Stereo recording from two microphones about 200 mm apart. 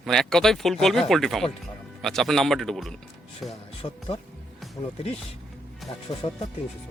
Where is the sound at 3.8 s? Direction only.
25° left (ahead or behind).